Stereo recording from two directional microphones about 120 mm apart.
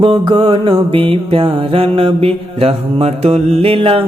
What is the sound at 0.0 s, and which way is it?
Mantra, 45° right (ahead or behind).